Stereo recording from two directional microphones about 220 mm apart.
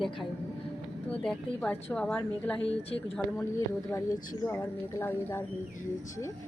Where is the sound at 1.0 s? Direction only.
5° left (ahead or behind).